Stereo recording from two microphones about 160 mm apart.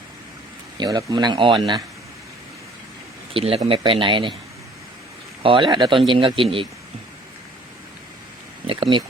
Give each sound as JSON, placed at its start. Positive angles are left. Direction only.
{"t": 0.8, "sound": "speech", "side_deg": -25}
{"t": 3.3, "sound": "speech", "side_deg": -35}
{"t": 5.4, "sound": "speech", "side_deg": -30}
{"t": 8.6, "sound": "a sound", "side_deg": -35}